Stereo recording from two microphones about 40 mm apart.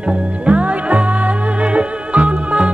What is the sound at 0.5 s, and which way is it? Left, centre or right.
Music, right.